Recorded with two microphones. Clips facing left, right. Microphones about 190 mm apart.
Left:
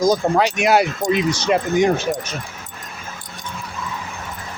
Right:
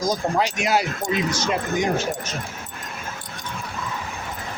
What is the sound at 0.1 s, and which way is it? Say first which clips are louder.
Speech: left 5 dB; 70° left (ahead or behind).